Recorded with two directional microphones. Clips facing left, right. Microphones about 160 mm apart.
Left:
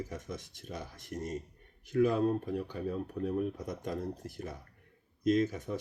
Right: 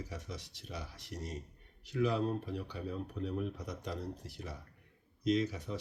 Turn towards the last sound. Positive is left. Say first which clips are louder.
# left 4 dB
turn(degrees=50)  # may be behind; listen again after turning